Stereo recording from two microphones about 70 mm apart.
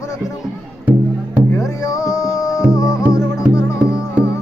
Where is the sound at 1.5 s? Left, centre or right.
Left.